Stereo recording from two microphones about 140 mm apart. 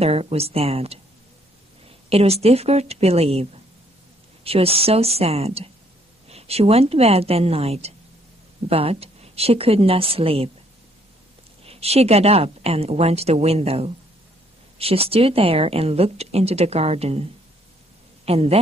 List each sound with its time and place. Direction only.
0.0 s speech: 45° right (ahead or behind)
2.0 s speech: 45° right (ahead or behind)
4.5 s speech: 45° right (ahead or behind)
11.6 s a man's voice: 45° right (ahead or behind)